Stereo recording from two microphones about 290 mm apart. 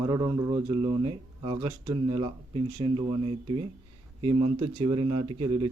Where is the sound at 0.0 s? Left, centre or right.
Centre.